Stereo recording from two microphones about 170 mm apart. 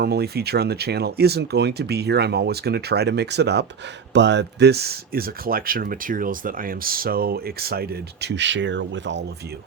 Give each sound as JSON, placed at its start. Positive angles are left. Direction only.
{"t": 0.0, "sound": "speech", "side_deg": -70}